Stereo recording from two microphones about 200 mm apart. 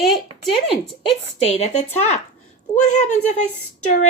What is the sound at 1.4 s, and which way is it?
Speech, 30° left (ahead or behind).